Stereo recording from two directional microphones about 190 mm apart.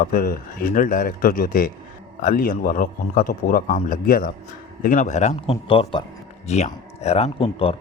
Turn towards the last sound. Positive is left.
turn(degrees=30)  # may be behind; listen again after turning